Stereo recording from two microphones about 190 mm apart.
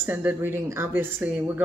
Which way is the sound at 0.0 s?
10° right (ahead or behind).